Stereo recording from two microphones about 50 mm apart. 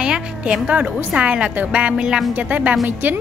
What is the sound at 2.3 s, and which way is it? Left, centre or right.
Speech, right.